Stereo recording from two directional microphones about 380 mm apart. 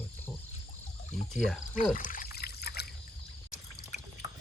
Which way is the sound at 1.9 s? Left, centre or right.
Left.